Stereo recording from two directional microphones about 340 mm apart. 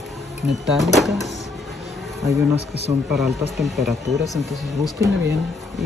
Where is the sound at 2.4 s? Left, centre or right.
Centre.